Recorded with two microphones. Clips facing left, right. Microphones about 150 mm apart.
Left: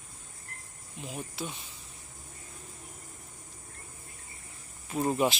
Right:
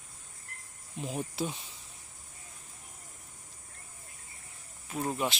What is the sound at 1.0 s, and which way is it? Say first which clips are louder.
Speech: right 4 dB; 35° right (ahead or behind).